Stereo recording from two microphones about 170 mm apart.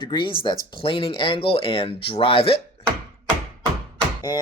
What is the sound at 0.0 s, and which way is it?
Speech, 30° left (ahead or behind).